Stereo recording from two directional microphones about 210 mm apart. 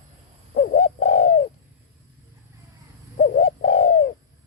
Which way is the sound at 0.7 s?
35° left (ahead or behind).